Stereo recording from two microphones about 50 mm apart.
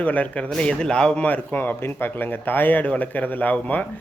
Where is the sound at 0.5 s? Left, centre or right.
Centre.